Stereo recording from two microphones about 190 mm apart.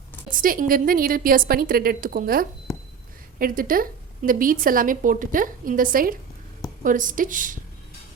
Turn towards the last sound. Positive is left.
turn(degrees=-45)  # may be behind; listen again after turning